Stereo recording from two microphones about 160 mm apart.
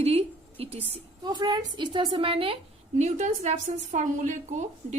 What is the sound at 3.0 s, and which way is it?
A woman's voice, 45° right (ahead or behind).